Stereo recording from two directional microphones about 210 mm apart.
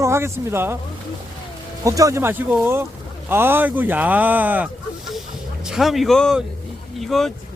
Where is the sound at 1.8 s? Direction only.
15° right (ahead or behind).